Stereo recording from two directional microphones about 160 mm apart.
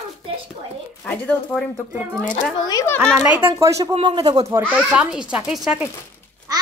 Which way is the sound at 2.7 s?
20° left (ahead or behind).